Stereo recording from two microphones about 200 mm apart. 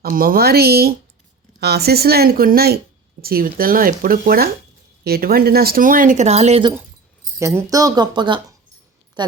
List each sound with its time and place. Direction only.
0.0 s a woman's voice: 45° right (ahead or behind)
7.3 s a woman's voice: 15° right (ahead or behind)